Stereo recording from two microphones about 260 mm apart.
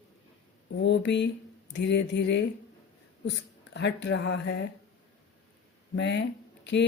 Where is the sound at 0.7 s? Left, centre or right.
Left.